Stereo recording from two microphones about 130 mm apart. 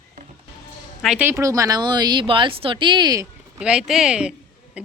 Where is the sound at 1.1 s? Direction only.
20° right (ahead or behind).